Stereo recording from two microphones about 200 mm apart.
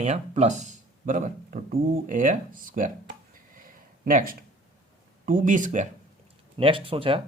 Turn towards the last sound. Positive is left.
turn(degrees=-25)  # may be behind; listen again after turning